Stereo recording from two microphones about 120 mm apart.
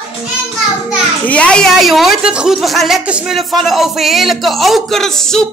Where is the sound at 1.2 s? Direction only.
10° left (ahead or behind).